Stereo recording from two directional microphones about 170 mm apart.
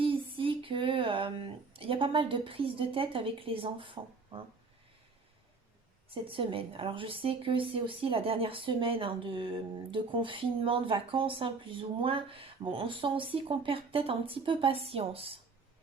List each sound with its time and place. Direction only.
0.0 s music: 30° right (ahead or behind)
6.1 s a woman's voice: 30° right (ahead or behind)